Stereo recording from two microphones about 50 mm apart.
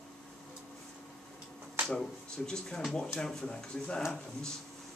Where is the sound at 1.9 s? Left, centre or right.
Centre.